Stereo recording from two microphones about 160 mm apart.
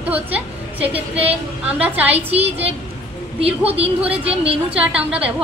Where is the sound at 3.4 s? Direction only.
40° right (ahead or behind).